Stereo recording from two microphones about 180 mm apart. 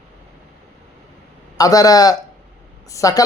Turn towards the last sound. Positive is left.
turn(degrees=20)  # may be behind; listen again after turning